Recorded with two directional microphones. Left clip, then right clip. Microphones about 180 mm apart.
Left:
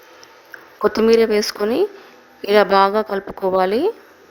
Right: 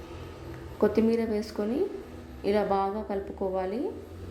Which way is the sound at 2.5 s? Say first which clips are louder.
Left 13 dB; 50° left (ahead or behind).